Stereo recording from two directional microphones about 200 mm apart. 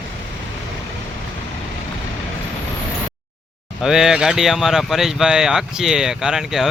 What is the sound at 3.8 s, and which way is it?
Speech, centre (ahead or behind).